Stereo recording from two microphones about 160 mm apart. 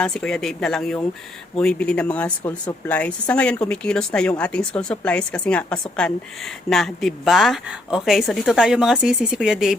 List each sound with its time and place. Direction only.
0.0 s speech: 5° left (ahead or behind)